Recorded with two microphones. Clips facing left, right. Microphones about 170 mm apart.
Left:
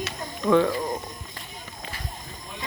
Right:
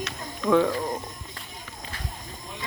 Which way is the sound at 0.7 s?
Centre (ahead or behind).